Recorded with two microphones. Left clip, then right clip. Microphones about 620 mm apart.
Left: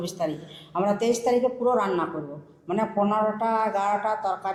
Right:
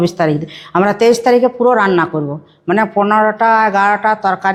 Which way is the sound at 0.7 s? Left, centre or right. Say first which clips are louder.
Right 13 dB; right.